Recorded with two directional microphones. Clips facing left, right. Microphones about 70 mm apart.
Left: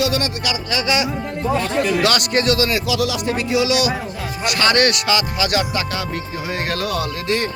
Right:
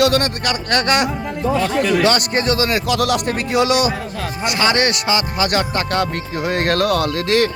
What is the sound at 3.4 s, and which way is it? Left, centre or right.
Speech, right.